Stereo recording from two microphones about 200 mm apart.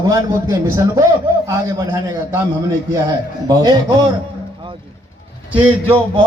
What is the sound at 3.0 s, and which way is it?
Speech, 20° right (ahead or behind).